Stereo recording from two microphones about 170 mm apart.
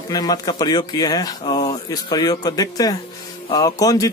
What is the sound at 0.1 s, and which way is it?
A man's voice, 20° left (ahead or behind).